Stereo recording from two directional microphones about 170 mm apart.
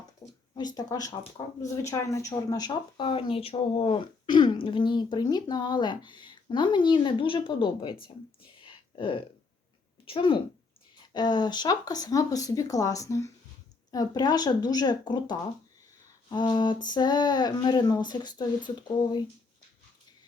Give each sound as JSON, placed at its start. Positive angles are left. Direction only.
{"t": 0.5, "sound": "speech", "side_deg": 25}
{"t": 8.6, "sound": "a sound", "side_deg": 30}
{"t": 10.1, "sound": "speech", "side_deg": 30}